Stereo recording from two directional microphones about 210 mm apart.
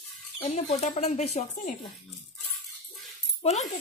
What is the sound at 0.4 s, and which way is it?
Speech, 30° left (ahead or behind).